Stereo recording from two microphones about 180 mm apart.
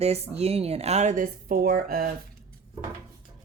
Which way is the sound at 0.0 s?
35° right (ahead or behind).